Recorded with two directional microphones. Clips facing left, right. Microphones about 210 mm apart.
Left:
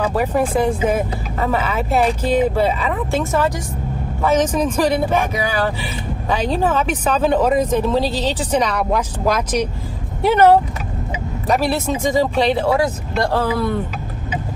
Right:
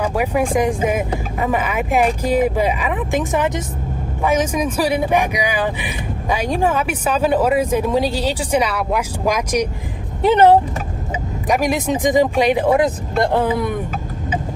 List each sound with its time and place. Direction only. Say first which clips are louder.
0.0 s a woman's voice: even; 10° right (ahead or behind)